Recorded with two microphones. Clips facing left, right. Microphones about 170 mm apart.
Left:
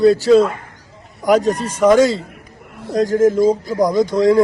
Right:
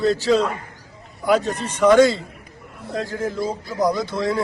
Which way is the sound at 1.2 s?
40° left (ahead or behind).